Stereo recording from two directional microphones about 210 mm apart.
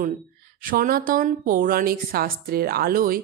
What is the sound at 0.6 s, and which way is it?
A woman's voice, 45° right (ahead or behind).